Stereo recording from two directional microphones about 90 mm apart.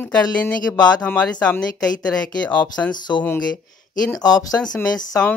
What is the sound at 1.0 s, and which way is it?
Speech, 15° left (ahead or behind).